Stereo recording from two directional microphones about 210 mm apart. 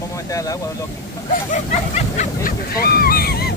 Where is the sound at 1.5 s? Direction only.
35° left (ahead or behind).